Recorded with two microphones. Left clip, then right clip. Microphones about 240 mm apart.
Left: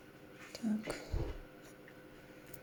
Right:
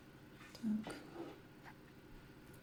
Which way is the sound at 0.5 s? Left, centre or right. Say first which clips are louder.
Left 4 dB; centre.